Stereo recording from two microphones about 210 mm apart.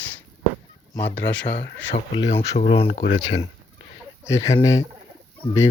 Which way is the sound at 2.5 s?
30° left (ahead or behind).